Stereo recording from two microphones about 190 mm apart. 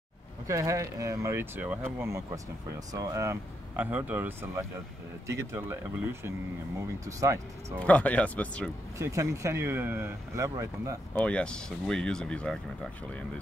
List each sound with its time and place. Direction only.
0.5 s speech: 15° right (ahead or behind)
7.8 s speech: 5° left (ahead or behind)
8.9 s speech: 15° right (ahead or behind)
11.1 s speech: 5° left (ahead or behind)